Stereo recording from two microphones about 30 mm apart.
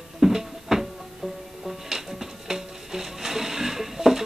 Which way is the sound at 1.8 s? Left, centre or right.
Centre.